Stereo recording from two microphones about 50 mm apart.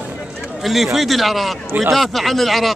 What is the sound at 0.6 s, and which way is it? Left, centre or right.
Speech, centre.